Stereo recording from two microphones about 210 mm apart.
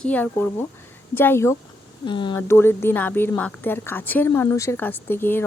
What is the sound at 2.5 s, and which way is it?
A woman's voice, 10° left (ahead or behind).